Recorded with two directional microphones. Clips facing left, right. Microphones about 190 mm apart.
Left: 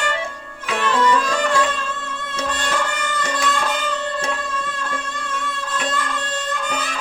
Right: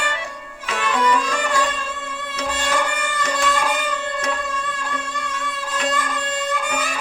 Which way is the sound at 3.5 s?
10° right (ahead or behind).